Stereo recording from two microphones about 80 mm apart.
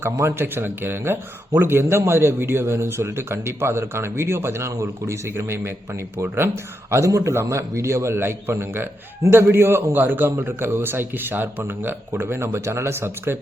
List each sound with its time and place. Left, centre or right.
0.0 s speech: right